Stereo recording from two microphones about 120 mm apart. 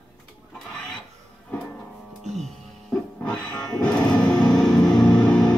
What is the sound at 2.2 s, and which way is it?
Music, 65° right (ahead or behind).